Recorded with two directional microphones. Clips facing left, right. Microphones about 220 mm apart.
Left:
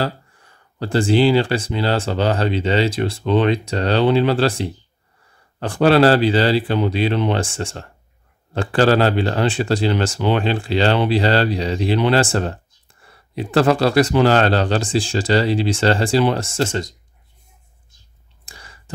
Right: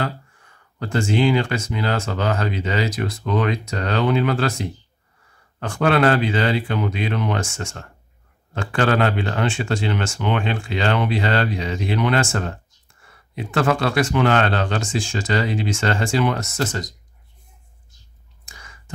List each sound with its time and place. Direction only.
0.0 s speech: 35° left (ahead or behind)
18.4 s clicking: 35° left (ahead or behind)